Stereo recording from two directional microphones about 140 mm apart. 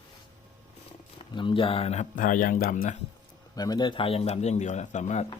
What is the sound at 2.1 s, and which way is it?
Speech, 75° left (ahead or behind).